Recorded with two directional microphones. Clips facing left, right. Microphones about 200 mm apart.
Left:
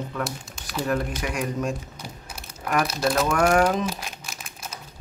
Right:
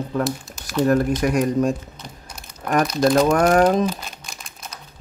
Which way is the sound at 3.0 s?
40° right (ahead or behind).